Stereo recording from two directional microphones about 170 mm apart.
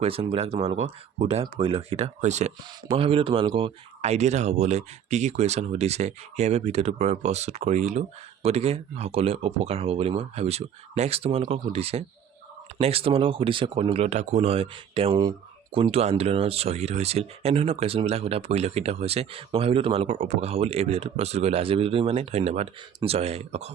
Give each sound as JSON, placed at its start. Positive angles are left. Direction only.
{"t": 0.0, "sound": "speech", "side_deg": -35}
{"t": 2.9, "sound": "speech", "side_deg": -30}